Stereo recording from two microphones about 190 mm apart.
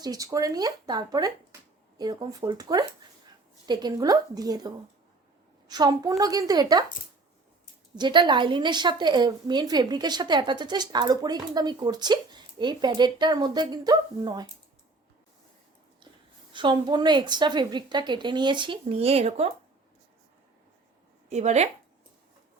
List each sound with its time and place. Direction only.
0.0 s a woman's voice: 20° right (ahead or behind)
7.9 s a woman's voice: 25° right (ahead or behind)
16.5 s a woman's voice: 25° right (ahead or behind)
21.2 s speech: 35° right (ahead or behind)